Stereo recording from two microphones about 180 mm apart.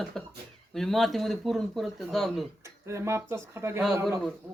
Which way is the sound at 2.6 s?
15° right (ahead or behind).